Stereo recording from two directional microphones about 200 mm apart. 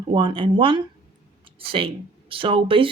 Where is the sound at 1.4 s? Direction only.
25° right (ahead or behind).